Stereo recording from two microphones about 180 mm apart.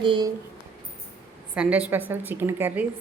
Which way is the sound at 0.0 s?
25° right (ahead or behind).